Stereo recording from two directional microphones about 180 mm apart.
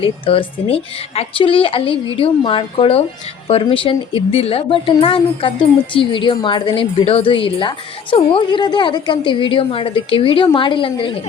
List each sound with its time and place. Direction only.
0.0 s a woman's voice: 30° left (ahead or behind)